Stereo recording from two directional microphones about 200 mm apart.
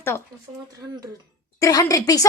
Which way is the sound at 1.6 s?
15° left (ahead or behind).